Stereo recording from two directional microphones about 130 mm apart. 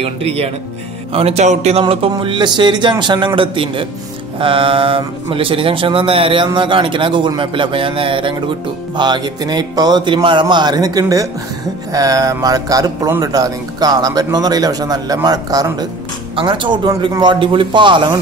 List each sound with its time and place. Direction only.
0.0 s a man's voice: 50° right (ahead or behind)